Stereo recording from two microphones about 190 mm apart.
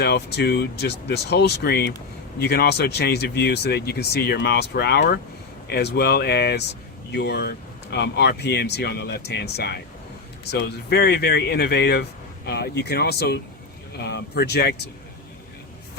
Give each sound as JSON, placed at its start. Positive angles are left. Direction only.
{"t": 0.0, "sound": "speech", "side_deg": 60}